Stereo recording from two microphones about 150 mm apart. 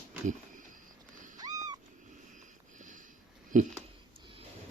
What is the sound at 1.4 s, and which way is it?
Cat, 25° right (ahead or behind).